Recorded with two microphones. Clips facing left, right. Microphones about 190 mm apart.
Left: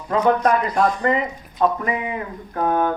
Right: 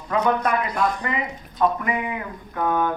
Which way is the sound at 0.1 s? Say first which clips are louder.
Left 4 dB; 35° left (ahead or behind).